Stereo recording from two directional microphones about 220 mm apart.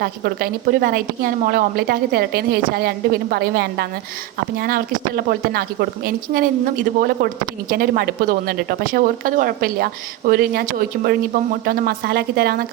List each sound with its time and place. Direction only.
0.0 s a woman's voice: 45° right (ahead or behind)